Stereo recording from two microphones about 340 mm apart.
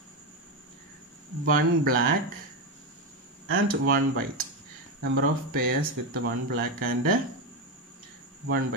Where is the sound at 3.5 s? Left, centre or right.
Right.